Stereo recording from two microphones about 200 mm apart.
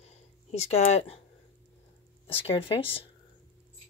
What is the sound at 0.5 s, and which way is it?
Speech, 30° left (ahead or behind).